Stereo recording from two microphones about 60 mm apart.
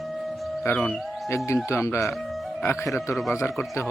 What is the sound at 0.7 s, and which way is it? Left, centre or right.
Speech, left.